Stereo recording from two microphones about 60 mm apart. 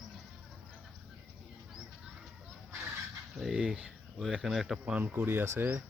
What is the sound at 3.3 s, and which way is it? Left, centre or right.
Speech, centre.